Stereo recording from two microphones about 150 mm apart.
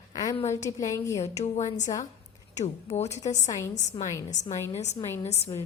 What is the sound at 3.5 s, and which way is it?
Speech, 20° left (ahead or behind).